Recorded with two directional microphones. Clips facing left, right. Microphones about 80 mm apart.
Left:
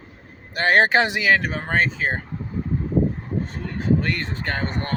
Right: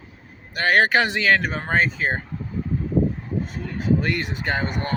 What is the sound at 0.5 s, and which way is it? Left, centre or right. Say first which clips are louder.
Speech: left 1 dB; left.